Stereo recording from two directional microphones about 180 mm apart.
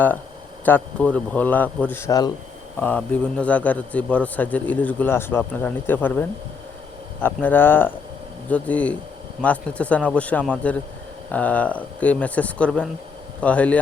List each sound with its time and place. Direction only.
0.6 s a man's voice: 10° left (ahead or behind)
2.8 s a man's voice: 10° left (ahead or behind)